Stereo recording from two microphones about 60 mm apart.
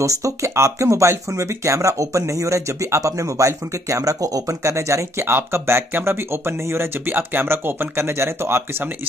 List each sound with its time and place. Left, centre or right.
0.0 s speech: right